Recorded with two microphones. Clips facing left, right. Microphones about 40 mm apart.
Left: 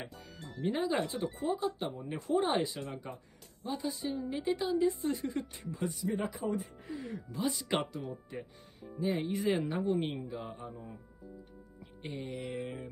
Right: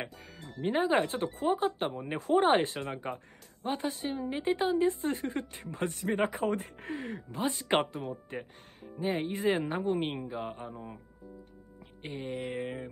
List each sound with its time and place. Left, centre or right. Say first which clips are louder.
0.6 s a woman's voice: right 5 dB; right
12.0 s music: right 3 dB; right